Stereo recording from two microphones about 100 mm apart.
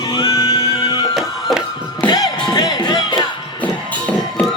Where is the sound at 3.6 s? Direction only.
15° left (ahead or behind).